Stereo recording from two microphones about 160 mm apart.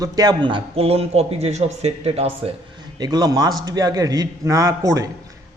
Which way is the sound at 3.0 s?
25° right (ahead or behind).